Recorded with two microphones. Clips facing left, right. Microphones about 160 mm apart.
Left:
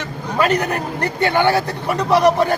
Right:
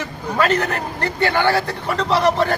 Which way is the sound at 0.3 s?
15° left (ahead or behind).